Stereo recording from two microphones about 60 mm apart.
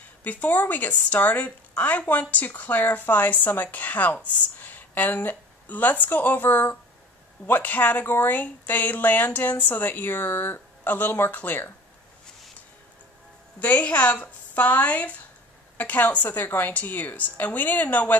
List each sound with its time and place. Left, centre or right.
0.2 s a woman's voice: left
13.6 s a woman's voice: left